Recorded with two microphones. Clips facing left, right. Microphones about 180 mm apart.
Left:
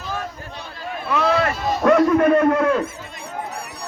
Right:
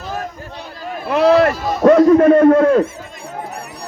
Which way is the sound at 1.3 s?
40° right (ahead or behind).